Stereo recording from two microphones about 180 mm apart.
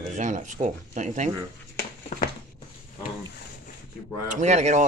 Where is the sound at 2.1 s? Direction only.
40° left (ahead or behind).